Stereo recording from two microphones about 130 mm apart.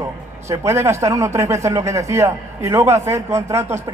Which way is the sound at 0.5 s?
20° right (ahead or behind).